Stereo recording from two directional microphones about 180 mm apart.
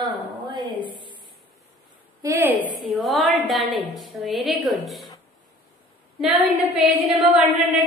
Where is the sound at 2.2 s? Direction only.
10° right (ahead or behind).